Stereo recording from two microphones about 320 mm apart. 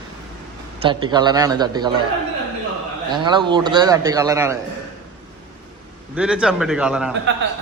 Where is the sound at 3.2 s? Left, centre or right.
Centre.